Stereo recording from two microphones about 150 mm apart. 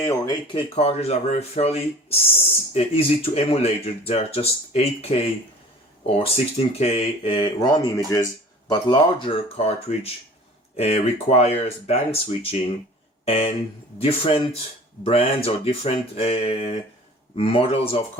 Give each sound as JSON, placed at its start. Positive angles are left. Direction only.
{"t": 0.0, "sound": "speech", "side_deg": 20}
{"t": 0.5, "sound": "speech", "side_deg": 40}
{"t": 8.7, "sound": "speech", "side_deg": 35}